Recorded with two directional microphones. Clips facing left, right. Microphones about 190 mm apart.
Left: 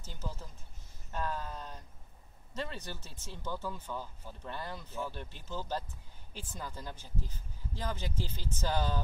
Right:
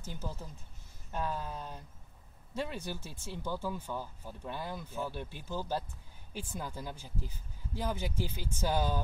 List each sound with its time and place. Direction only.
0.0 s speech: 15° right (ahead or behind)